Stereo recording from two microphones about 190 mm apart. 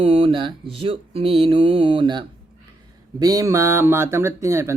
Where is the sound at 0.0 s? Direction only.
30° right (ahead or behind).